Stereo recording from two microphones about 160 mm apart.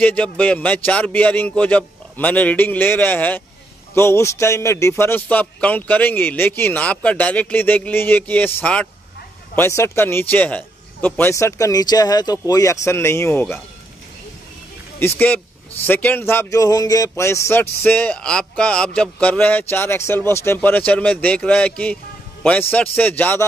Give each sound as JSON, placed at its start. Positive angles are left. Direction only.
{"t": 0.0, "sound": "a man's voice", "side_deg": 10}
{"t": 15.0, "sound": "a man's voice", "side_deg": 15}